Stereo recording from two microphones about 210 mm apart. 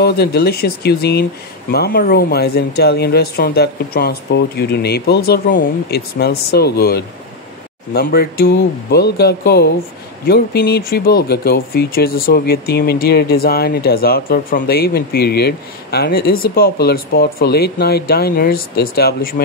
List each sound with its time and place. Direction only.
0.0 s speech: 50° left (ahead or behind)